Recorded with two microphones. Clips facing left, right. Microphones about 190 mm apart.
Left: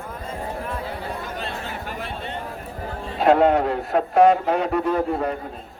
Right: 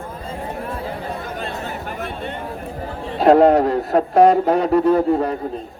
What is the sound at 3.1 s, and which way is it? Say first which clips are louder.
A man's voice: right 5 dB; 40° right (ahead or behind).